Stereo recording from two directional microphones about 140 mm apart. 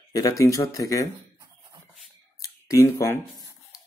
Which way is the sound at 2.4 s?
20° left (ahead or behind).